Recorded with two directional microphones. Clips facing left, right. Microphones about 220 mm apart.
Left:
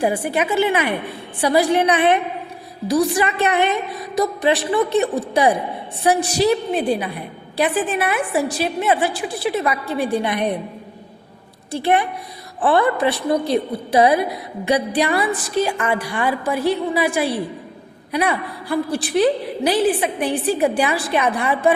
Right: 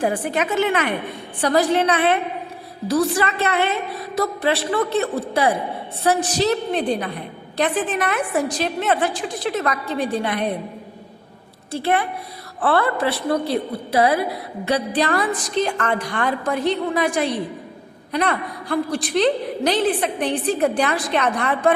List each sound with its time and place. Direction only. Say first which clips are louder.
0.0 s a woman's voice: left 2 dB; 10° left (ahead or behind)
11.7 s a woman's voice: left 2 dB; 15° left (ahead or behind)